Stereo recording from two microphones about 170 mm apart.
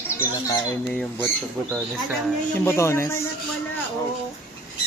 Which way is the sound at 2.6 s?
15° left (ahead or behind).